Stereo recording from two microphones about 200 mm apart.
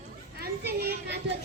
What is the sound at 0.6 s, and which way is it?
Children playing, 50° right (ahead or behind).